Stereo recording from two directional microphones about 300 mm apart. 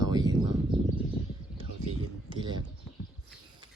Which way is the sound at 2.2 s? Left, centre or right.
Centre.